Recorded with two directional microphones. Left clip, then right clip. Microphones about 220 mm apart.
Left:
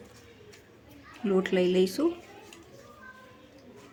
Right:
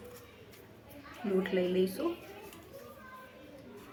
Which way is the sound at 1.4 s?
45° left (ahead or behind).